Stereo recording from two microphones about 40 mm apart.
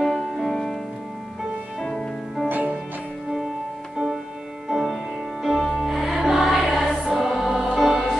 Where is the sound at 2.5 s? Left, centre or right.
Right.